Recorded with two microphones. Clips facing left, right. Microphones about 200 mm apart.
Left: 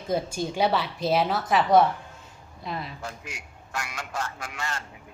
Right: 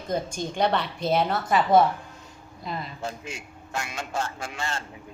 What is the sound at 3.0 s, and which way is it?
A man's voice, 25° right (ahead or behind).